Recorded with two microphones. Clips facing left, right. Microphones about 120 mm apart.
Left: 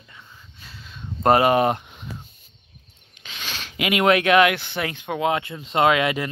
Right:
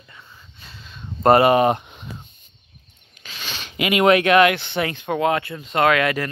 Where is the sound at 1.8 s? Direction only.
20° right (ahead or behind).